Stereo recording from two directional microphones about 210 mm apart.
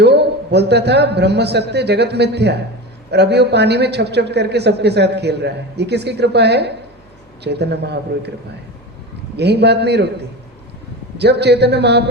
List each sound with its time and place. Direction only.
0.0 s a man's voice: 55° right (ahead or behind)
9.4 s a man's voice: 55° right (ahead or behind)